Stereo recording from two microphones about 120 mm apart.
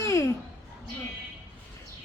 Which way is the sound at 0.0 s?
25° left (ahead or behind).